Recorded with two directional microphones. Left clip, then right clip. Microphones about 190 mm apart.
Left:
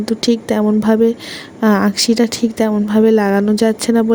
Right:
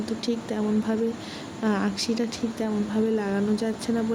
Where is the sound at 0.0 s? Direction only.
60° left (ahead or behind).